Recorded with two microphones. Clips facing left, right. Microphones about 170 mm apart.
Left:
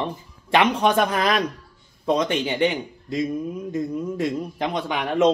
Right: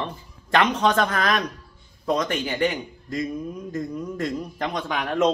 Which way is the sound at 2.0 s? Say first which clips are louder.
Left 3 dB; 25° left (ahead or behind).